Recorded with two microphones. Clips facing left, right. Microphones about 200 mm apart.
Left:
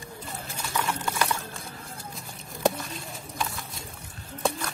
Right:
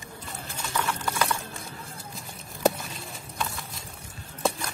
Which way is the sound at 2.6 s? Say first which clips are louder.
Right 1 dB; centre (ahead or behind).